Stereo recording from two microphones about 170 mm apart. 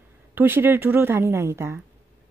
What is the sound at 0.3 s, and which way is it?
Speech, 10° right (ahead or behind).